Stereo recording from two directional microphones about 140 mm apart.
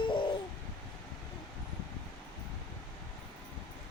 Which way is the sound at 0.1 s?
35° left (ahead or behind).